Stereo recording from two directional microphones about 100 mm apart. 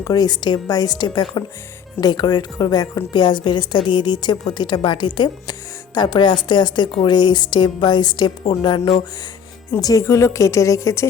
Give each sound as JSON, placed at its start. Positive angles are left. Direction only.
{"t": 0.0, "sound": "a woman's voice", "side_deg": 40}
{"t": 9.8, "sound": "a woman's voice", "side_deg": 35}